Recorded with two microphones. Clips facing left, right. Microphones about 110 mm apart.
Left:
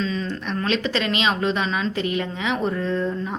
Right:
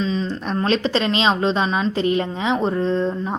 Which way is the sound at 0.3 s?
35° right (ahead or behind).